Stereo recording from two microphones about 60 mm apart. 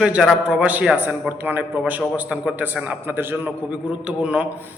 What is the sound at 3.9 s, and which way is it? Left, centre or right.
Speech, centre.